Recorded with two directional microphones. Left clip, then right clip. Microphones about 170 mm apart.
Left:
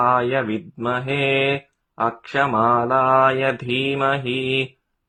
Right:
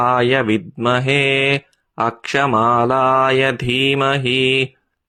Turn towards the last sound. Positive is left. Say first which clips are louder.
# right 6 dB
turn(degrees=-35)  # may be behind; listen again after turning